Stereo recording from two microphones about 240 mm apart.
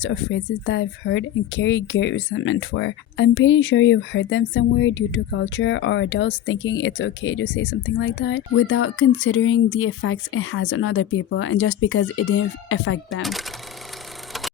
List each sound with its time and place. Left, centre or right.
0.0 s speech: left